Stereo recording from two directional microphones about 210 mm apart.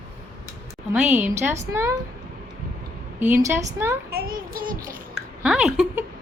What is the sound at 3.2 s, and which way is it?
Speech, 10° right (ahead or behind).